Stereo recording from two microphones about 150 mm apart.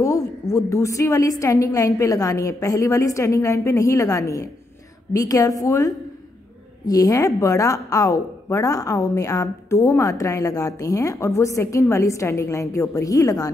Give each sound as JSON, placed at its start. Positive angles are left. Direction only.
{"t": 0.0, "sound": "a woman's voice", "side_deg": 20}